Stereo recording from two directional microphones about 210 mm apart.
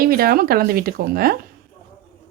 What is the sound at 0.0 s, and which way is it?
Speech, 45° right (ahead or behind).